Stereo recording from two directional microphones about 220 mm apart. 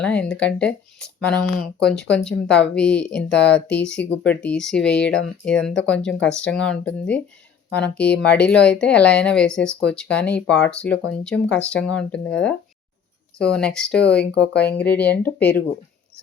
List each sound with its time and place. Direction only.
0.0 s speech: 5° left (ahead or behind)
14.3 s speech: 45° left (ahead or behind)
14.7 s speech: 5° left (ahead or behind)